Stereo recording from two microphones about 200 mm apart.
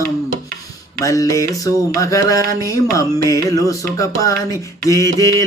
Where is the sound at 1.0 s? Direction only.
15° left (ahead or behind).